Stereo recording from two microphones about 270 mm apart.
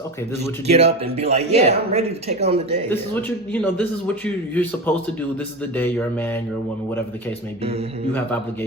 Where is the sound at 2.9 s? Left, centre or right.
Centre.